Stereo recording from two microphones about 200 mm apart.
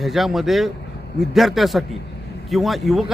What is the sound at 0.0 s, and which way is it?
Speech, centre (ahead or behind).